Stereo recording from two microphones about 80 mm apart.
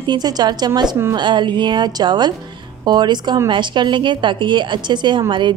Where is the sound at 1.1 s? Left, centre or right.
Right.